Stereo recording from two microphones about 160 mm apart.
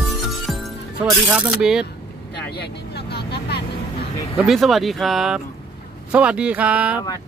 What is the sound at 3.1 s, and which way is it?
Vehicle, 90° left.